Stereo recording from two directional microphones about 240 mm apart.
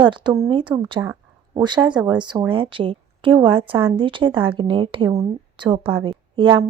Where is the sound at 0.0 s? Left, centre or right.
Centre.